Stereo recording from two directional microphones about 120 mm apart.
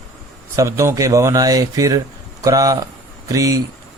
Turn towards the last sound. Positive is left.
turn(degrees=-30)  # may be behind; listen again after turning